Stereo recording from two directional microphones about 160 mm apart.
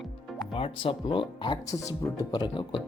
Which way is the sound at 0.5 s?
35° left (ahead or behind).